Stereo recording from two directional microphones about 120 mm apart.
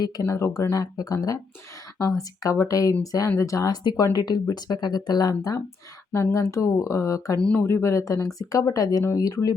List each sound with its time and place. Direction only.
0.0 s speech: 25° left (ahead or behind)